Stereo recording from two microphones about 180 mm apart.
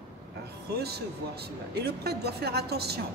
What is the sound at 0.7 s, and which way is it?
Speech, 65° right (ahead or behind).